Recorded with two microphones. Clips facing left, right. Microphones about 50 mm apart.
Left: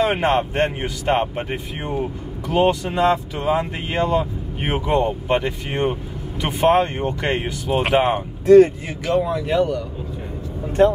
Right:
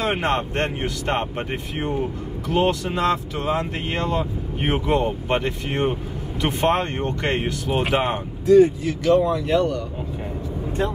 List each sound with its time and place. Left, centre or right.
0.0 s speech: centre
2.4 s speech: centre
8.5 s speech: left
9.0 s speech: centre